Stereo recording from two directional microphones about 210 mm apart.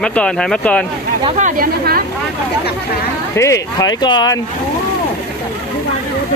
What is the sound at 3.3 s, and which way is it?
Speech, 15° left (ahead or behind).